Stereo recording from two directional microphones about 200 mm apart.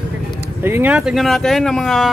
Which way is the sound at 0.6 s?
10° right (ahead or behind).